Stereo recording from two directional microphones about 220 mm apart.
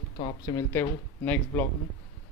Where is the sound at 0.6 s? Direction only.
10° left (ahead or behind).